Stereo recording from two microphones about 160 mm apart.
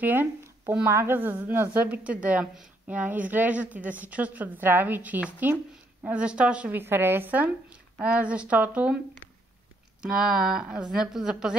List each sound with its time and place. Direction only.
0.0 s speech: 10° right (ahead or behind)
10.0 s speech: 5° right (ahead or behind)